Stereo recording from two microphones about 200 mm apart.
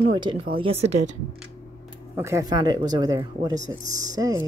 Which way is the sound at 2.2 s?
15° right (ahead or behind).